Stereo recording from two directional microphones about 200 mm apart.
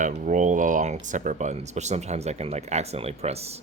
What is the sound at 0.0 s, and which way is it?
Speech, 40° right (ahead or behind).